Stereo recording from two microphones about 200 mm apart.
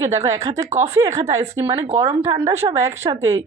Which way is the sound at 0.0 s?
15° right (ahead or behind).